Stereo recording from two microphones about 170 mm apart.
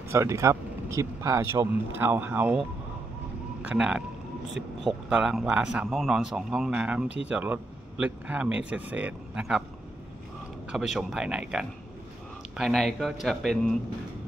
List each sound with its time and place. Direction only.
0.1 s speech: 15° right (ahead or behind)
3.6 s a man's voice: 5° right (ahead or behind)
10.7 s a man's voice: 5° right (ahead or behind)